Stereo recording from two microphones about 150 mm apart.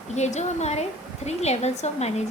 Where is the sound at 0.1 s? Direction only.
50° left (ahead or behind).